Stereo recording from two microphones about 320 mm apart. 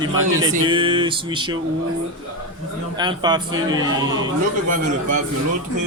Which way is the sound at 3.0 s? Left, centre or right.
Centre.